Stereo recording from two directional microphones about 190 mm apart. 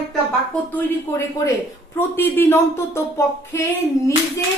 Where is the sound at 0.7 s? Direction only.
15° left (ahead or behind).